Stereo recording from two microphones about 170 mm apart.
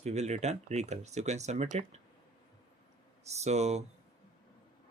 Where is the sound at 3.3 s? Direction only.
40° right (ahead or behind).